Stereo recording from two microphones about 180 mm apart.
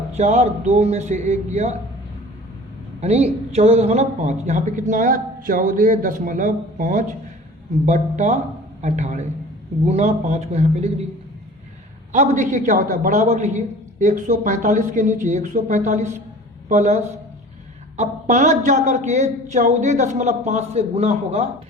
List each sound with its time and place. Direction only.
0.1 s a man's voice: 40° right (ahead or behind)
3.0 s a woman's voice: 35° right (ahead or behind)
12.1 s a woman's voice: 45° right (ahead or behind)